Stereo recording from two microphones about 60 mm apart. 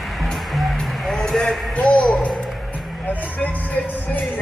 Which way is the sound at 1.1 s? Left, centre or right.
Centre.